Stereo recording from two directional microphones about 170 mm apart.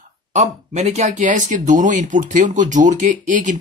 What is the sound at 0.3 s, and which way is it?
Speech, 40° right (ahead or behind).